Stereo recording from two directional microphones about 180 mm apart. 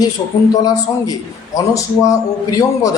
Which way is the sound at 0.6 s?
20° left (ahead or behind).